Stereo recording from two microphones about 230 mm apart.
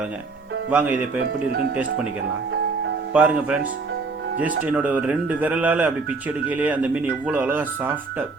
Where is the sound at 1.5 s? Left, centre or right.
Right.